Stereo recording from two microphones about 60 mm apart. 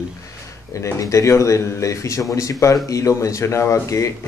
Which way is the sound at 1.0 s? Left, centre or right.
Left.